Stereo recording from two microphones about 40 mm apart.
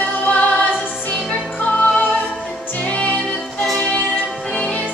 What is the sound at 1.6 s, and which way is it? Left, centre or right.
Music, left.